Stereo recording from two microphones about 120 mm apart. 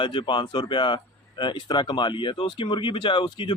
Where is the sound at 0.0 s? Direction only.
45° left (ahead or behind).